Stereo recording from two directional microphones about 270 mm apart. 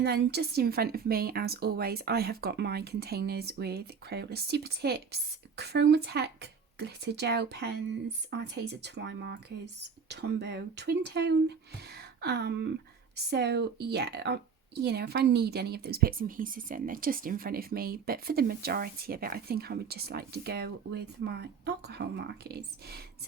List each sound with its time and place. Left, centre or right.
0.0 s a woman's voice: right
11.9 s a sound: right
13.3 s a woman's voice: right